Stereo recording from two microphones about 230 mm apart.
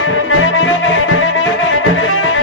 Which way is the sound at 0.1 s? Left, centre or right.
Left.